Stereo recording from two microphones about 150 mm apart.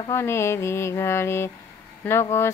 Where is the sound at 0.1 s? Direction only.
15° left (ahead or behind).